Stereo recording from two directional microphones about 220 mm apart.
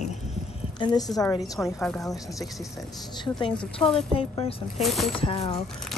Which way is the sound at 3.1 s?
20° left (ahead or behind).